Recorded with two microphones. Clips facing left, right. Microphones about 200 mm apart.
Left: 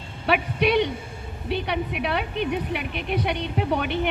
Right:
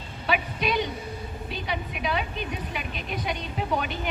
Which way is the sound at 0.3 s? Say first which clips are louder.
Left 5 dB; 65° left (ahead or behind).